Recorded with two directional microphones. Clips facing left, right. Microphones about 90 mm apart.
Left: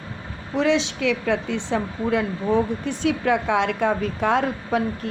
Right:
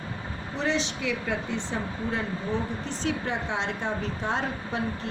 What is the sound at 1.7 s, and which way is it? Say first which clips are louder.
A woman's voice: left 10 dB; 70° left (ahead or behind).